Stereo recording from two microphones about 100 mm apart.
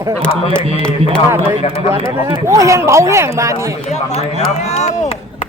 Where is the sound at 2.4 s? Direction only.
30° right (ahead or behind).